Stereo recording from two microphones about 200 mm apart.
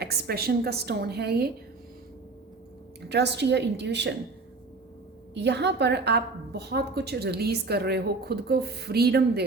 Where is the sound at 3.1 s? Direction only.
55° right (ahead or behind).